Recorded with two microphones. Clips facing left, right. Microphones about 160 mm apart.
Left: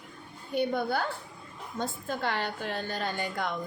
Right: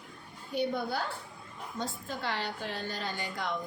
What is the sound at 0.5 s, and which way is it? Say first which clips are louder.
A woman's voice: left 3 dB; 55° left (ahead or behind).